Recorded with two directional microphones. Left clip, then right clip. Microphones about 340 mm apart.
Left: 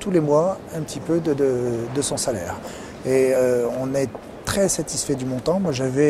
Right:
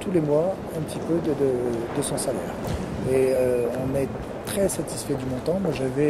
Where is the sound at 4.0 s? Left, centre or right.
Left.